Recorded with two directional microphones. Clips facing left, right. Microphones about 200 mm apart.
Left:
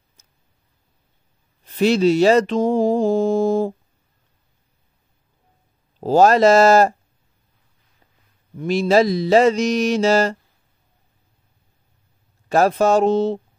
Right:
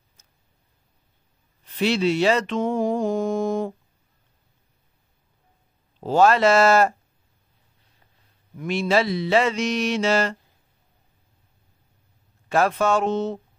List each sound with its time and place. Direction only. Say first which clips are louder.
1.7 s mantra: left 6 dB; 40° left (ahead or behind)
5.9 s mantra: left 4 dB; 40° left (ahead or behind)
8.5 s mantra: left 6 dB; 35° left (ahead or behind)
12.4 s mantra: left 5 dB; 40° left (ahead or behind)